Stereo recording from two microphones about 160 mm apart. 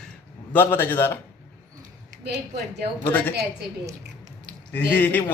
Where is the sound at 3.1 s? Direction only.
10° left (ahead or behind).